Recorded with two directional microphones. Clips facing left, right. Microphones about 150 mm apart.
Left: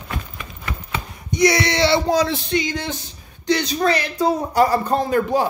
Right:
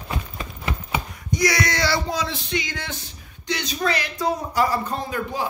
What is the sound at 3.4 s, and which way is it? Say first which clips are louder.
Speech: left 6 dB; 35° left (ahead or behind).